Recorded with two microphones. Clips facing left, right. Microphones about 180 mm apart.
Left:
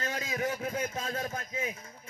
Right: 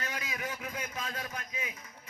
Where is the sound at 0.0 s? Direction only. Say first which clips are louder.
Left 6 dB; 30° left (ahead or behind).